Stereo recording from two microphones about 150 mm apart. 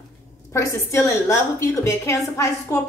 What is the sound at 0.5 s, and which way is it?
A woman's voice, 20° left (ahead or behind).